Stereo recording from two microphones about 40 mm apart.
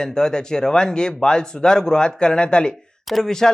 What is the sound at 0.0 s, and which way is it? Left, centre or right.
A man's voice, centre.